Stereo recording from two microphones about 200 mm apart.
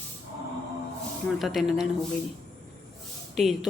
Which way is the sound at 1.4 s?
Centre (ahead or behind).